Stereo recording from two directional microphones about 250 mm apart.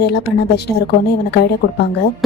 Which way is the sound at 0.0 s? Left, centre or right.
Left.